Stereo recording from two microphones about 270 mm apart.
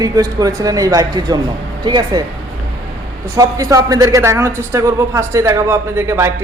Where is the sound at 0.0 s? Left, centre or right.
Centre.